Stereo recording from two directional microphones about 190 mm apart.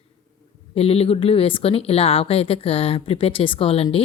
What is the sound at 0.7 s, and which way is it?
Speech, 30° left (ahead or behind).